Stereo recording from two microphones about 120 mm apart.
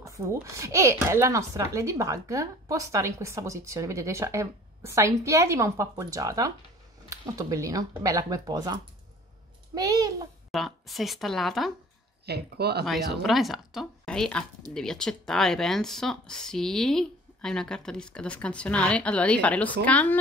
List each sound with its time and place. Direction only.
0.0 s a child's voice: 25° right (ahead or behind)
10.5 s speech: centre (ahead or behind)
12.8 s speech: centre (ahead or behind)